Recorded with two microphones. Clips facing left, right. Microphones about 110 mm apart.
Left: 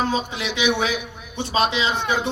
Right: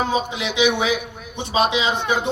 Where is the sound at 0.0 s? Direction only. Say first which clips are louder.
Right 2 dB; 15° right (ahead or behind).